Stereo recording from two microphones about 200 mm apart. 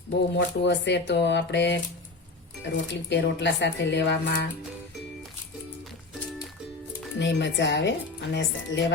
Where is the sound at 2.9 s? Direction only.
60° left (ahead or behind).